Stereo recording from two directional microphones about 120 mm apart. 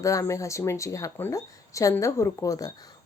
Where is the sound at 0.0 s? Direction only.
25° left (ahead or behind).